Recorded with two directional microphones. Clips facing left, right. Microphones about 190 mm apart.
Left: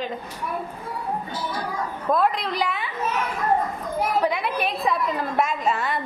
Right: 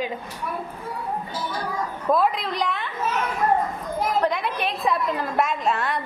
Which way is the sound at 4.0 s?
10° left (ahead or behind).